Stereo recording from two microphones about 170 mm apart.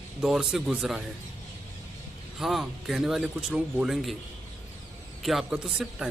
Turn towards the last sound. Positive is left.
turn(degrees=-5)  # may be behind; listen again after turning